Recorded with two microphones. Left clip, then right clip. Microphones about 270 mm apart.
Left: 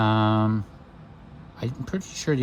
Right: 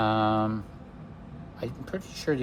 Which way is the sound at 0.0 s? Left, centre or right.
Left.